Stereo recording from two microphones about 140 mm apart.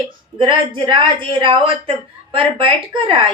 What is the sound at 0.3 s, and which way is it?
Speech, 35° right (ahead or behind).